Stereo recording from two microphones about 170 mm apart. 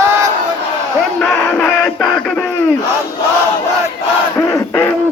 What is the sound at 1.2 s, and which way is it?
Music, 10° left (ahead or behind).